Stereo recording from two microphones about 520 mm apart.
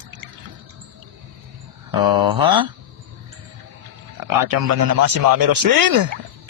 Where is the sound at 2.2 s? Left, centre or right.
Centre.